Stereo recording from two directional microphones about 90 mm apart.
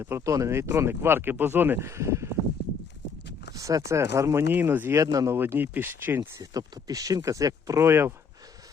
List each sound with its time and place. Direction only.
0.0 s speech: 35° right (ahead or behind)
1.9 s speech: 35° right (ahead or behind)
3.5 s speech: 40° right (ahead or behind)
4.9 s speech: 35° right (ahead or behind)
5.4 s speech: 25° right (ahead or behind)
6.4 s speech: 45° right (ahead or behind); by 8.1 s 30° right (ahead or behind)